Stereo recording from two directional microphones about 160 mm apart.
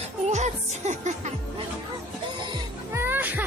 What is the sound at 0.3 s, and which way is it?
Music, 45° right (ahead or behind).